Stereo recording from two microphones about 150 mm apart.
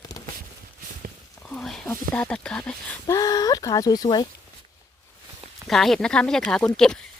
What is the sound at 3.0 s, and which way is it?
Speech, 25° left (ahead or behind).